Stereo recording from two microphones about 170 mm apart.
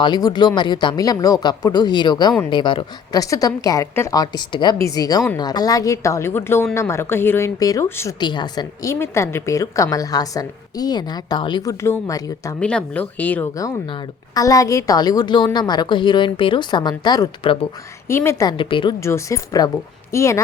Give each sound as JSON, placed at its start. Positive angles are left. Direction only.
{"t": 0.0, "sound": "a woman's voice", "side_deg": 25}
{"t": 8.2, "sound": "a woman's voice", "side_deg": 25}
{"t": 12.5, "sound": "speech", "side_deg": 5}
{"t": 13.6, "sound": "a woman's voice", "side_deg": 20}
{"t": 18.1, "sound": "a woman's voice", "side_deg": 15}
{"t": 18.9, "sound": "speech", "side_deg": 15}